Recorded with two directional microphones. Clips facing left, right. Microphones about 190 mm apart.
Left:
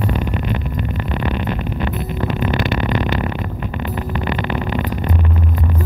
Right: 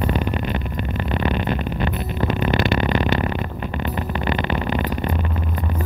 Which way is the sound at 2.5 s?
30° right (ahead or behind).